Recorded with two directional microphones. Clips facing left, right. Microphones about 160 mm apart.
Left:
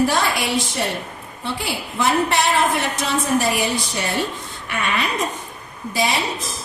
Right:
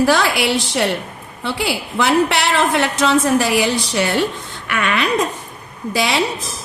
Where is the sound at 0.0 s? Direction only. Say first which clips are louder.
Right 4 dB; 90° right.